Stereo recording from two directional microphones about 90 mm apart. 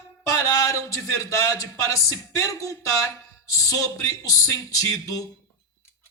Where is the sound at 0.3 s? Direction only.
35° left (ahead or behind).